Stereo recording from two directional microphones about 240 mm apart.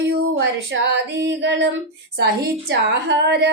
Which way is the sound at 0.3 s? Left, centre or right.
Right.